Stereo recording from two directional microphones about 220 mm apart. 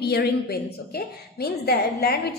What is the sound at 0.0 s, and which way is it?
A woman's voice, 45° left (ahead or behind).